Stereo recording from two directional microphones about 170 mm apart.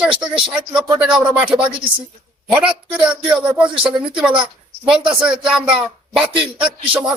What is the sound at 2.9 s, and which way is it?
A man's voice, 5° right (ahead or behind).